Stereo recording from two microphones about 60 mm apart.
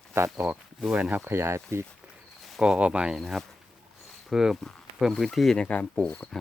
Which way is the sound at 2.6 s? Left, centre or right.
Centre.